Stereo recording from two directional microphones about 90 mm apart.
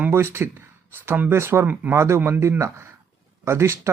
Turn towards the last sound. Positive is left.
turn(degrees=-30)  # may be behind; listen again after turning